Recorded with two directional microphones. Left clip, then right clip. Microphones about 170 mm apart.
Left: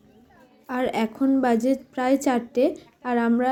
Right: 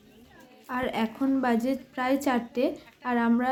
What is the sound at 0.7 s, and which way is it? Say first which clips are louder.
A woman's voice: left 4 dB; 15° left (ahead or behind).